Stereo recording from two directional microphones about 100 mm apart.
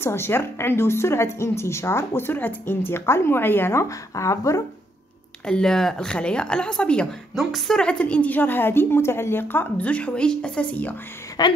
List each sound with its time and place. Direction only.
0.0 s a woman's voice: 25° left (ahead or behind)
4.1 s speech: 30° left (ahead or behind)
5.5 s a woman's voice: 5° left (ahead or behind)
11.4 s speech: 45° left (ahead or behind)